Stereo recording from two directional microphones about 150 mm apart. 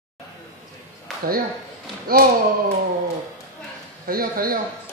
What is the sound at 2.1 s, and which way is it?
Speech, 75° right (ahead or behind).